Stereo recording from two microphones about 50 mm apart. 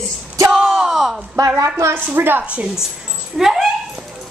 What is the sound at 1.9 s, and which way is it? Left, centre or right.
Speech, right.